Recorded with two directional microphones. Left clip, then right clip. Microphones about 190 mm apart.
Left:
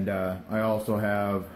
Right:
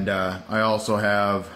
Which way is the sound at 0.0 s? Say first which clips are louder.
Right 5 dB; 20° right (ahead or behind).